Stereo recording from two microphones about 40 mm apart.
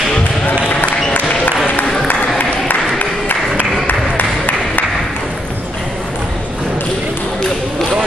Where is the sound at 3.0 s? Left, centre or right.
Left.